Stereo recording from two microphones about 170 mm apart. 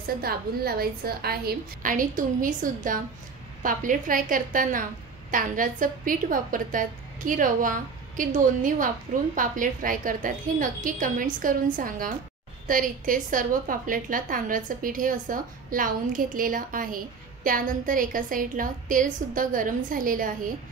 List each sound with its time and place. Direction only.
0.2 s a woman's voice: 65° right (ahead or behind)